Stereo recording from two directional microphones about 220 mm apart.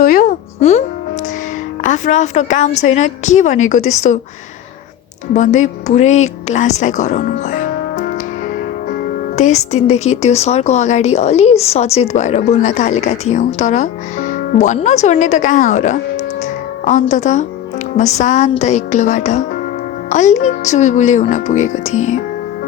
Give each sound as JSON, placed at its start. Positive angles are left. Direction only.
{"t": 0.0, "sound": "speech", "side_deg": 40}
{"t": 1.8, "sound": "speech", "side_deg": 35}
{"t": 5.3, "sound": "speech", "side_deg": 35}